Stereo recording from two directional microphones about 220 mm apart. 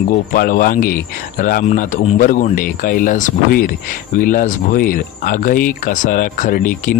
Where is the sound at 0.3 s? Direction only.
40° left (ahead or behind).